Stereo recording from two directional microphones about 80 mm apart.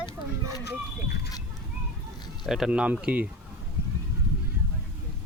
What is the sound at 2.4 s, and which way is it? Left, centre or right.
Speech, centre.